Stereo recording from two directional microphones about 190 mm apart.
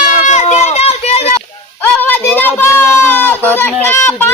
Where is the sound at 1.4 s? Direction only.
10° left (ahead or behind).